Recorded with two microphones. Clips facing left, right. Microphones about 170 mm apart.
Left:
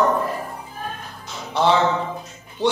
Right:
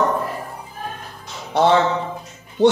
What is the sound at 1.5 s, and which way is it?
Music, 55° right (ahead or behind).